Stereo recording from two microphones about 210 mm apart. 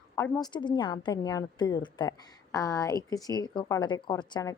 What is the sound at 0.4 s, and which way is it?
A woman's voice, 20° left (ahead or behind).